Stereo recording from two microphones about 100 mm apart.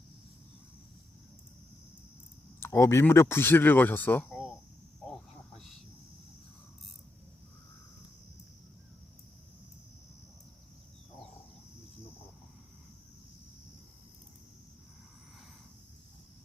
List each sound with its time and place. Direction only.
2.6 s speech: 25° left (ahead or behind)
4.3 s cricket: 5° right (ahead or behind)